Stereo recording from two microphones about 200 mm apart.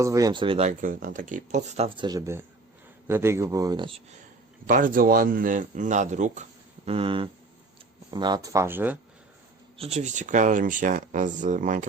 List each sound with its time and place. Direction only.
0.0 s speech: 15° right (ahead or behind); by 2.0 s 30° right (ahead or behind)
2.0 s speech: 15° right (ahead or behind)
4.6 s speech: 45° right (ahead or behind); by 9.0 s 10° right (ahead or behind)
9.7 s speech: 30° right (ahead or behind)